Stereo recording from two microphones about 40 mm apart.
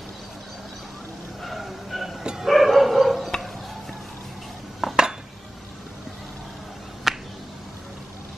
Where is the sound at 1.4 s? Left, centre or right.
Centre.